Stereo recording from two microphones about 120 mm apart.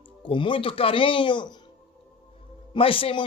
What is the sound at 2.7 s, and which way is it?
Speech, 50° left (ahead or behind).